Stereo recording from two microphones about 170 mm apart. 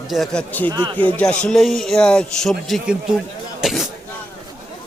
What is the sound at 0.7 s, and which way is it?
Speech, 25° right (ahead or behind).